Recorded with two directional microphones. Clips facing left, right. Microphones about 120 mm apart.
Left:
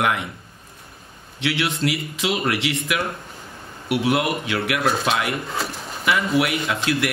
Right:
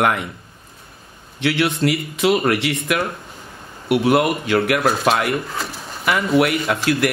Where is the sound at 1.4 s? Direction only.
55° right (ahead or behind).